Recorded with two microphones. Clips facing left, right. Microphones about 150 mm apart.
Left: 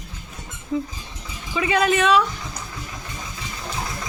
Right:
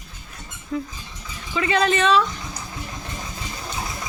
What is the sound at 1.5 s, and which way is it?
Speech, 10° left (ahead or behind).